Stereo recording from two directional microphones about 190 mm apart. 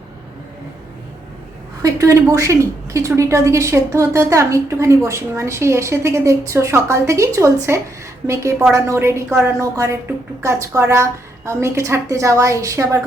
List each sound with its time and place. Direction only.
1.8 s a woman's voice: 15° right (ahead or behind)